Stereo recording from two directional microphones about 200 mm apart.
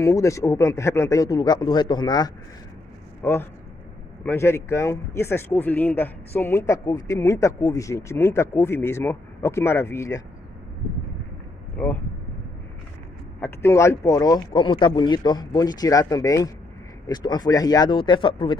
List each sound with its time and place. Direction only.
0.0 s speech: 15° left (ahead or behind)
13.4 s speech: 15° left (ahead or behind)